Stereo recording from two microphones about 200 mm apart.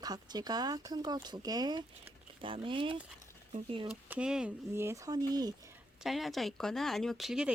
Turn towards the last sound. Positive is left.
turn(degrees=0)  # may be behind; listen again after turning